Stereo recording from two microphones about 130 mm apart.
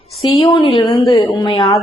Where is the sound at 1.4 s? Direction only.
45° left (ahead or behind).